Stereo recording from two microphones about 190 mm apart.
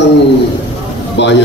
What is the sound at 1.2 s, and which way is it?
Speech, 65° left (ahead or behind).